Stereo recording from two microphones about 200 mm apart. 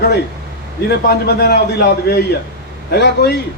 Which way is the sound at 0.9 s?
55° left (ahead or behind).